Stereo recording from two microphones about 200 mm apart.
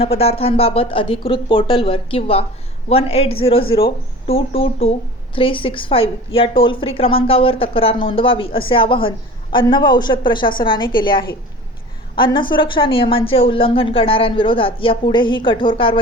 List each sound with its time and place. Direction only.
0.0 s speech: 30° left (ahead or behind)